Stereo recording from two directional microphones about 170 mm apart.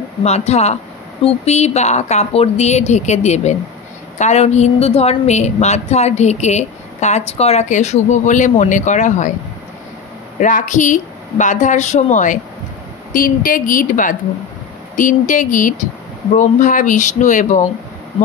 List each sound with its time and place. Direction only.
0.2 s a woman's voice: 40° left (ahead or behind)
10.4 s a woman's voice: 50° left (ahead or behind)